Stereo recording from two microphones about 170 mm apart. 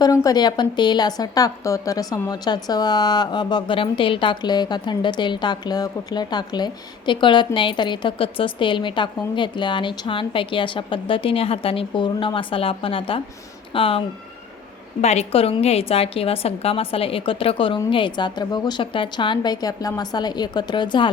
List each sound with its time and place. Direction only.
0.0 s a woman's voice: 20° left (ahead or behind)
15.0 s a woman's voice: 40° left (ahead or behind)